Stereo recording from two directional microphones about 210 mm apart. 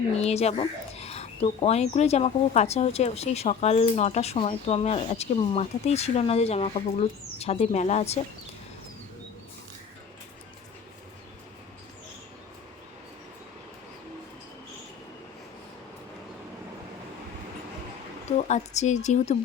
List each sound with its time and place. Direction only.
0.2 s speech: 30° left (ahead or behind)
18.3 s a woman's voice: 30° left (ahead or behind)